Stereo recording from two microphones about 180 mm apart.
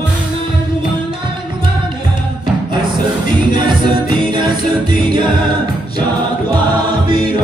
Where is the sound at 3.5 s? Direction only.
25° right (ahead or behind).